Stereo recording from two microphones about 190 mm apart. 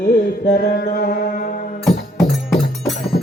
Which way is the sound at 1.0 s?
60° left (ahead or behind).